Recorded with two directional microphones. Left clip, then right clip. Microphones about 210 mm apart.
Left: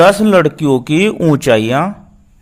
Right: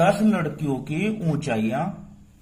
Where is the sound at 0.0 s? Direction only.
55° left (ahead or behind).